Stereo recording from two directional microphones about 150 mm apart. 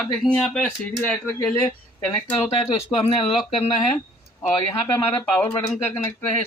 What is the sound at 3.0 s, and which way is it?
Speech, 40° left (ahead or behind).